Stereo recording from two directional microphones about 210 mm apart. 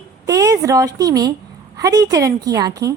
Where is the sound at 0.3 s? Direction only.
15° right (ahead or behind).